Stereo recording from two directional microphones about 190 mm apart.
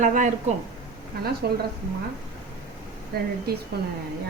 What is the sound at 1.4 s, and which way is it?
Speech, 55° right (ahead or behind).